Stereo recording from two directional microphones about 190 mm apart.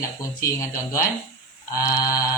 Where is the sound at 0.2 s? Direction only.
15° left (ahead or behind).